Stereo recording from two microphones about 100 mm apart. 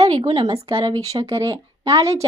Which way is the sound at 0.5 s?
65° right (ahead or behind).